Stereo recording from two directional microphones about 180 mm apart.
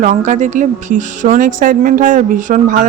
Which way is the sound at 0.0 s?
40° right (ahead or behind).